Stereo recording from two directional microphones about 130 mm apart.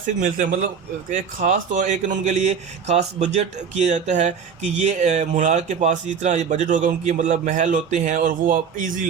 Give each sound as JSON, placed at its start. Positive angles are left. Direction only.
{"t": 0.0, "sound": "a man's voice", "side_deg": -85}